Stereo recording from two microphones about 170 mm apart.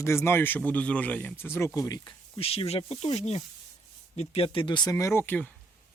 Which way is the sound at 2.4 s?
35° left (ahead or behind).